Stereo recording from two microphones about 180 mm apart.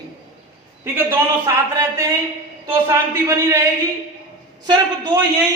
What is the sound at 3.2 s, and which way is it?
A man's voice, 15° right (ahead or behind).